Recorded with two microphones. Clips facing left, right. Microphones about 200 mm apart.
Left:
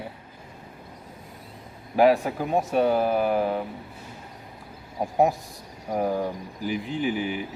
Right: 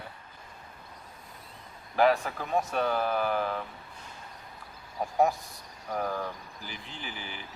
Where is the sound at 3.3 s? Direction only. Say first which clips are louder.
Left 6 dB; 30° left (ahead or behind).